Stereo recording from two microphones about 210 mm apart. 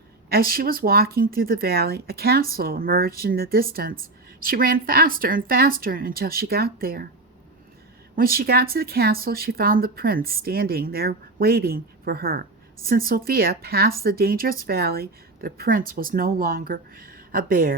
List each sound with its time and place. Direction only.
0.3 s speech: 45° right (ahead or behind)
8.1 s speech: 45° right (ahead or behind)